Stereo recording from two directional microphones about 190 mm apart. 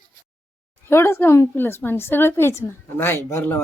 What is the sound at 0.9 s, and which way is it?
A woman's voice, 15° left (ahead or behind).